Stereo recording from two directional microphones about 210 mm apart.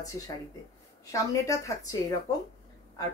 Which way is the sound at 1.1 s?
15° left (ahead or behind).